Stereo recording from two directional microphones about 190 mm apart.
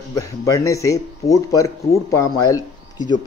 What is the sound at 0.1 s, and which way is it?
Speech, 15° left (ahead or behind).